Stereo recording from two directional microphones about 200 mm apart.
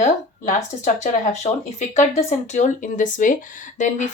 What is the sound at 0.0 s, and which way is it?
Speech, 35° left (ahead or behind).